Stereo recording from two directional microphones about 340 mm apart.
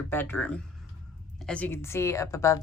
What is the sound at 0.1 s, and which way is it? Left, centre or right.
A woman's voice, centre.